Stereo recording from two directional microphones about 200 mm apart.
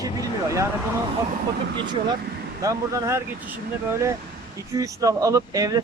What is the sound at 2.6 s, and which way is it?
Speech, 15° right (ahead or behind).